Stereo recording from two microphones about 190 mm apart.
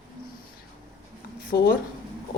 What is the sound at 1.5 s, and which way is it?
Speech, 50° left (ahead or behind).